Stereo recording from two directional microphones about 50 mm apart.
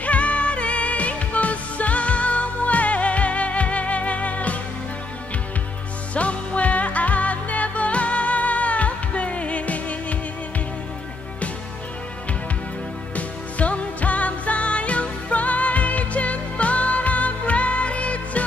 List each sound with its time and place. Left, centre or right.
0.0 s music: left
6.1 s music: left
13.1 s music: left